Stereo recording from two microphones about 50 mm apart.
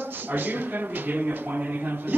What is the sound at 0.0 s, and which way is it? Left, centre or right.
A man's voice, right.